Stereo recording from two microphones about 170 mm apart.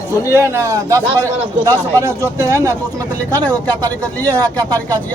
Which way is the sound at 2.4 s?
15° right (ahead or behind).